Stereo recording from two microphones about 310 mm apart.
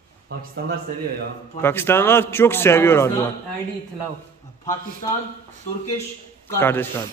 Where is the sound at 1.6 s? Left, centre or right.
Centre.